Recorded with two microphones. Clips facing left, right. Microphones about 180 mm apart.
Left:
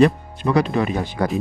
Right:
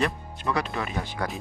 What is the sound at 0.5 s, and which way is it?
Speech, 20° left (ahead or behind).